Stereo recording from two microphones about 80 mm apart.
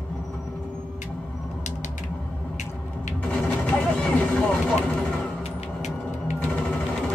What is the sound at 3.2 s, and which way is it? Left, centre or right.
Vehicle, centre.